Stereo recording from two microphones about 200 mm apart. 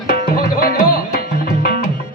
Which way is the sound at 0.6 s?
45° left (ahead or behind).